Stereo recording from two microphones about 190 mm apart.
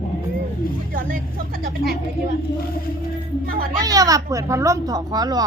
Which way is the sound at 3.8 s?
20° right (ahead or behind).